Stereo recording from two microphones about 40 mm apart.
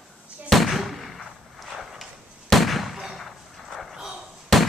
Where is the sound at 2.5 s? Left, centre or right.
Centre.